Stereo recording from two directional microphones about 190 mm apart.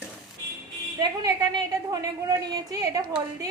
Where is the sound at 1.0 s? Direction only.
20° right (ahead or behind).